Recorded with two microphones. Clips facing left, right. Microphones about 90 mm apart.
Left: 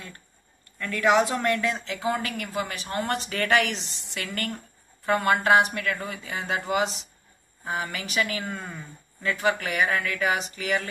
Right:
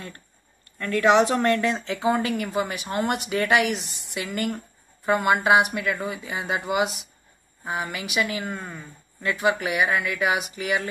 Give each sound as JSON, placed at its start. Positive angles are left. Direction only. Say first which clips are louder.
{"t": 0.8, "sound": "speech", "louder": "right 3 dB", "side_deg": -20}